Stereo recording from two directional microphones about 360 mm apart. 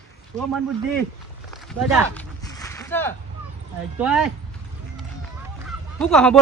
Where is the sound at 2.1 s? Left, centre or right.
Centre.